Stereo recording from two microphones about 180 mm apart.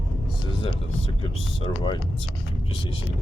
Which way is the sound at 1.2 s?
30° left (ahead or behind).